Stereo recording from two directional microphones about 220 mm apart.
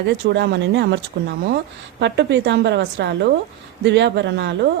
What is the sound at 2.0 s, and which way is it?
Speech, 55° right (ahead or behind).